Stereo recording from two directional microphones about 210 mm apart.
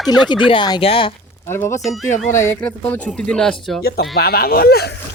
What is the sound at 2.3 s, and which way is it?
Speech, 10° left (ahead or behind).